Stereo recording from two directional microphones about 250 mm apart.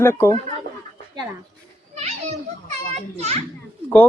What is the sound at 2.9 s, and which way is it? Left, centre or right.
Speech, right.